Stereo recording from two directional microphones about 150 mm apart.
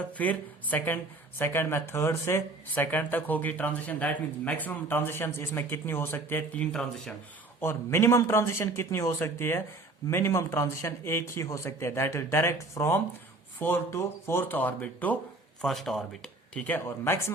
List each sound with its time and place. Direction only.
0.2 s speech: 10° left (ahead or behind)